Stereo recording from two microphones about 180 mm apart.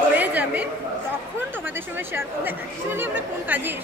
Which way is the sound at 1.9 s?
10° right (ahead or behind).